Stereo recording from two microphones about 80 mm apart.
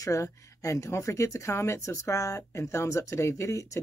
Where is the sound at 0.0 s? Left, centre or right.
Left.